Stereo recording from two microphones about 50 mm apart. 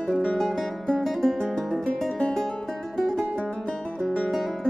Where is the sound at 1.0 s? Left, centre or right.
Centre.